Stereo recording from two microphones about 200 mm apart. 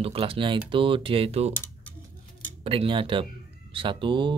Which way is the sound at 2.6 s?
25° right (ahead or behind).